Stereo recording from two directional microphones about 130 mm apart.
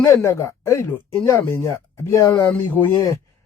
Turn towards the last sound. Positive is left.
turn(degrees=15)  # may be behind; listen again after turning